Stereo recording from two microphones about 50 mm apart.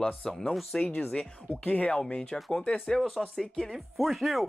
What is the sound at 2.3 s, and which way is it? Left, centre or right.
Speech, centre.